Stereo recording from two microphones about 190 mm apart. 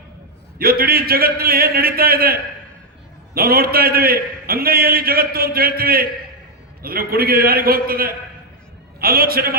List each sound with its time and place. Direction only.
0.6 s a man's voice: 50° right (ahead or behind)